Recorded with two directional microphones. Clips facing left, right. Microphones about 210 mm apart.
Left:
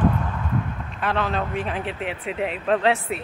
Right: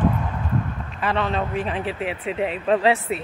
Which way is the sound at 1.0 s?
Centre (ahead or behind).